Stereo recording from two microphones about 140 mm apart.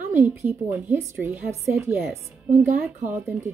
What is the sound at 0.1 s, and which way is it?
A woman's voice, 15° right (ahead or behind).